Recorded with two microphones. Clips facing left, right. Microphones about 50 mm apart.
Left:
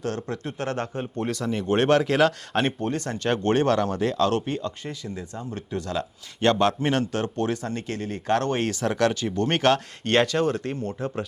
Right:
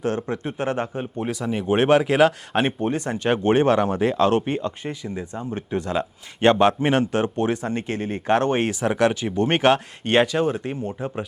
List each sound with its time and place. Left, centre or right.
0.0 s a man's voice: right